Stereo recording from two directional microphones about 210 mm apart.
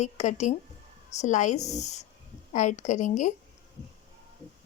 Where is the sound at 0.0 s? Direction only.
35° left (ahead or behind).